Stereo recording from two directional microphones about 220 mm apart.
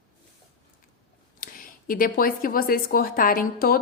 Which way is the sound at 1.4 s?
40° left (ahead or behind).